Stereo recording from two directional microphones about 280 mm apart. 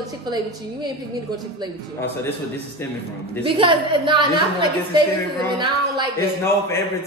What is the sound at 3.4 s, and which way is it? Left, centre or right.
A woman's voice, centre.